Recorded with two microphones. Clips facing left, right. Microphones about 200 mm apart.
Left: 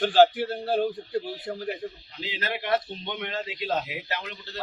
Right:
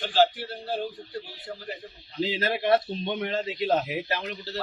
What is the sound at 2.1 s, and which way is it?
A man's voice, 30° right (ahead or behind).